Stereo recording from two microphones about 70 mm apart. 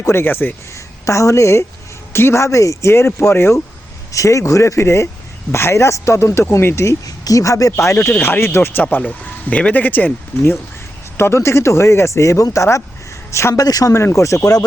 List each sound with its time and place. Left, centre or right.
0.0 s speech: left
0.7 s a woman's voice: left
4.1 s speech: left
7.0 s speech: left
8.1 s speech: left
8.8 s speech: left
13.7 s speech: left
14.0 s speech: left